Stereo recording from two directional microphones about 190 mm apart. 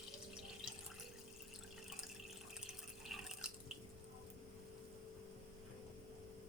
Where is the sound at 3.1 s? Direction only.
Centre (ahead or behind).